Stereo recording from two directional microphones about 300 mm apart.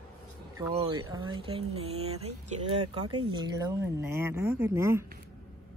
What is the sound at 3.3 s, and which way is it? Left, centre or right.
Speech, centre.